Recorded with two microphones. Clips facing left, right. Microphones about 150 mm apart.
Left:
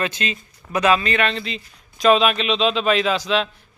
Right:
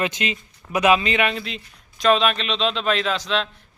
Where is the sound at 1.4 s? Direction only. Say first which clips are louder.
Left 3 dB; centre (ahead or behind).